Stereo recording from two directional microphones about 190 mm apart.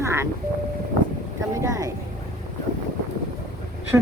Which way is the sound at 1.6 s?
15° right (ahead or behind).